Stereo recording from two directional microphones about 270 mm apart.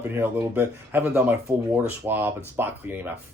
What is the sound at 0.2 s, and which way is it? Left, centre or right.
Speech, centre.